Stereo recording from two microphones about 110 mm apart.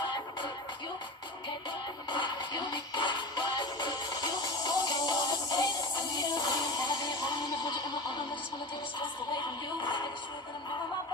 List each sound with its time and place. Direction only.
2.0 s music: 45° left (ahead or behind)
9.8 s music: 45° left (ahead or behind)